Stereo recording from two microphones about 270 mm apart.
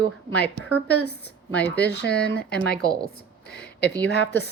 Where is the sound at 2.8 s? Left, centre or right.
Centre.